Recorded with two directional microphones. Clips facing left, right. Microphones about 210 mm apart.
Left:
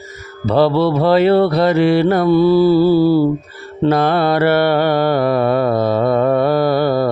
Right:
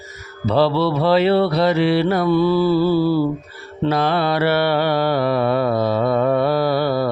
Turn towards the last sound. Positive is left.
turn(degrees=50)  # may be behind; listen again after turning